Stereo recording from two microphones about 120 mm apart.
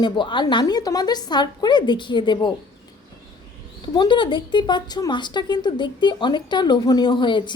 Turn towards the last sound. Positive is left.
turn(degrees=40)  # may be behind; listen again after turning